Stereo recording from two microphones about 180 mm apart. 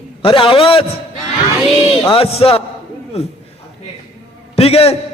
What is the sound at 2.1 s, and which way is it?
Speech, 30° left (ahead or behind).